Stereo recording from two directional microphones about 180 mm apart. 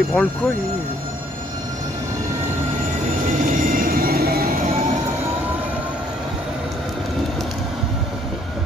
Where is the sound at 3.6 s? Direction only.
50° right (ahead or behind).